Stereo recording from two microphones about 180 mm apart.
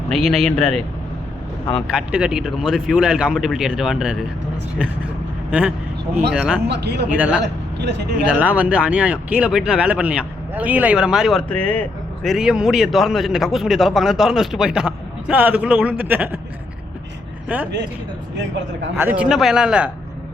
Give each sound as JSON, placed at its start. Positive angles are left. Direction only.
{"t": 0.1, "sound": "a man's voice", "side_deg": 5}
{"t": 1.9, "sound": "a man's voice", "side_deg": -5}
{"t": 5.5, "sound": "a man's voice", "side_deg": -5}
{"t": 6.7, "sound": "speech", "side_deg": -65}
{"t": 7.2, "sound": "speech", "side_deg": -5}
{"t": 7.4, "sound": "speech", "side_deg": -70}
{"t": 8.3, "sound": "a man's voice", "side_deg": -5}
{"t": 17.5, "sound": "speech", "side_deg": -10}
{"t": 18.9, "sound": "a man's voice", "side_deg": -10}